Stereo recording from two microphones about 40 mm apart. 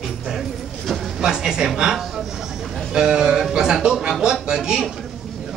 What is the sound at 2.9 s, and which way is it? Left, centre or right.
Speech, centre.